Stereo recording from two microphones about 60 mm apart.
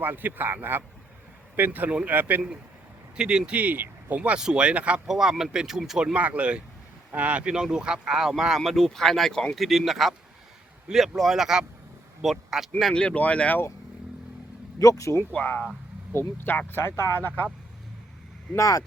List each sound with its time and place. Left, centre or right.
0.0 s speech: right
3.2 s speech: centre
5.0 s speech: centre
6.1 s speech: right; by 12.7 s centre
12.9 s speech: centre
14.8 s speech: left
15.3 s speech: left
18.5 s speech: left